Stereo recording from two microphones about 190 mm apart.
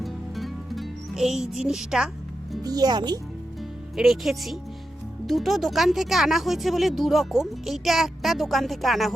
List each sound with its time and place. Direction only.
0.0 s music: centre (ahead or behind)
2.6 s speech: 20° right (ahead or behind)
3.9 s speech: centre (ahead or behind)